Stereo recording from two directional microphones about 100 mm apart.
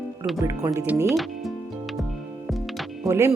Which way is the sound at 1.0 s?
Centre (ahead or behind).